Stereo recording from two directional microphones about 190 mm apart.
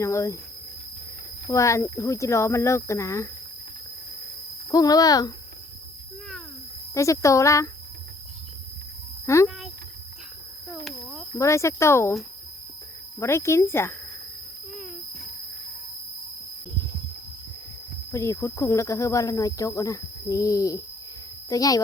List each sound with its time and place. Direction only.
0.0 s speech: 15° left (ahead or behind)
1.5 s speech: 15° left (ahead or behind)
4.7 s speech: 20° left (ahead or behind)
6.9 s speech: 15° left (ahead or behind)
9.2 s speech: 15° left (ahead or behind)
11.3 s speech: 15° left (ahead or behind)
13.1 s speech: 15° left (ahead or behind)
18.1 s speech: 15° left (ahead or behind)